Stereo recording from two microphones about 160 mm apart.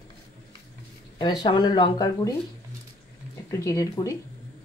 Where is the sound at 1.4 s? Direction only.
25° left (ahead or behind).